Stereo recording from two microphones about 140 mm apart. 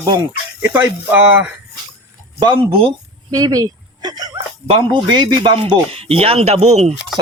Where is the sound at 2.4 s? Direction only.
35° right (ahead or behind); by 6.9 s 50° right (ahead or behind).